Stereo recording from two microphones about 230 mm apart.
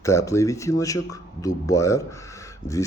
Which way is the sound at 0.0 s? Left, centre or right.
Centre.